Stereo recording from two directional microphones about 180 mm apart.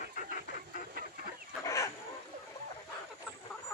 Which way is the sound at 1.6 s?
15° left (ahead or behind).